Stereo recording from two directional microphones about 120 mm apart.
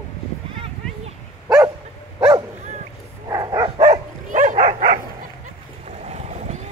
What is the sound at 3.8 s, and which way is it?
Dog, 90° right.